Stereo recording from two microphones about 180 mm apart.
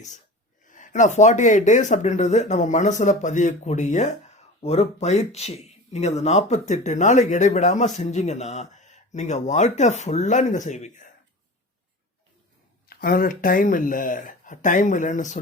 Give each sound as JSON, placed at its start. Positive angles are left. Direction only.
{"t": 0.6, "sound": "speech", "side_deg": 45}
{"t": 12.9, "sound": "speech", "side_deg": 50}